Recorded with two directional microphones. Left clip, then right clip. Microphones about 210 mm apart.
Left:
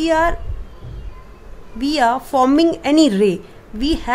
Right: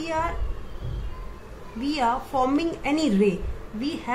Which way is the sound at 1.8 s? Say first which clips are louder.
Left 8 dB; 50° left (ahead or behind).